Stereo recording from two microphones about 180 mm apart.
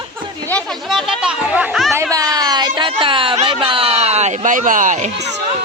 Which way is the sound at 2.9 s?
30° right (ahead or behind).